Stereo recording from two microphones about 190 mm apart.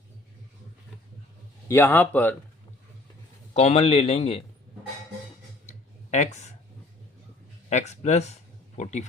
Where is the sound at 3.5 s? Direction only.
35° left (ahead or behind).